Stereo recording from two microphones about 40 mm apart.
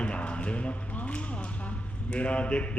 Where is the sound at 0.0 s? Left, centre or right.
Left.